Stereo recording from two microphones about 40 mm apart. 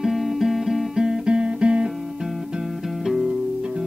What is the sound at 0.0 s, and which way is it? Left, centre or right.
Music, centre.